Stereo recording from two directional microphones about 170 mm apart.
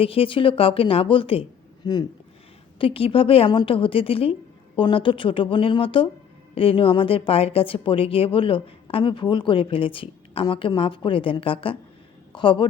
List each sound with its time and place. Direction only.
0.0 s a woman's voice: 35° left (ahead or behind)